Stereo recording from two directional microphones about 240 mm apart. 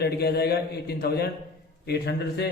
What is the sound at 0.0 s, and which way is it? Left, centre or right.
A man's voice, left.